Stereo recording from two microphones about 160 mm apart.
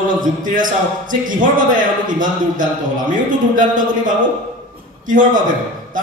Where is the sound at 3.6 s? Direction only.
55° right (ahead or behind).